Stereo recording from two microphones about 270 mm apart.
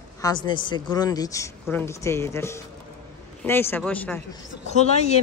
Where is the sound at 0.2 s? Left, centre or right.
Centre.